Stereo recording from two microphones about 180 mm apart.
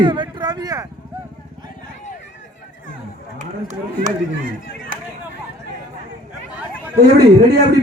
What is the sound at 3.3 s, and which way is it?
Speech, 45° right (ahead or behind).